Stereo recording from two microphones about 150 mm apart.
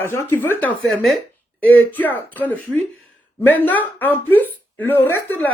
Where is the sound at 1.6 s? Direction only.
10° left (ahead or behind).